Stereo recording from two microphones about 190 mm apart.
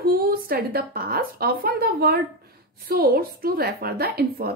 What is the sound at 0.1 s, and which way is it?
A woman's voice, 50° right (ahead or behind).